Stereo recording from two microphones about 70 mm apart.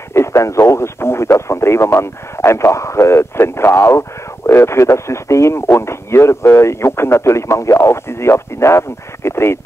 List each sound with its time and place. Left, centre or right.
0.1 s speech: left